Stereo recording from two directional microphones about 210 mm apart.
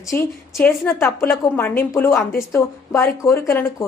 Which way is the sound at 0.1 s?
10° left (ahead or behind).